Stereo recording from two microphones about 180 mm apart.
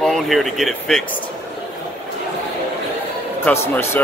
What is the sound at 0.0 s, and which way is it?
Speech, centre (ahead or behind).